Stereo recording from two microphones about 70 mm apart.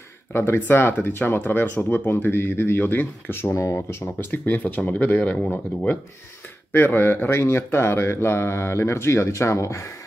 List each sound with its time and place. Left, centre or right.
0.3 s speech: left
6.7 s speech: left